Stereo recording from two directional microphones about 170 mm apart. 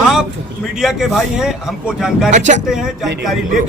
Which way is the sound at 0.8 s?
Centre (ahead or behind).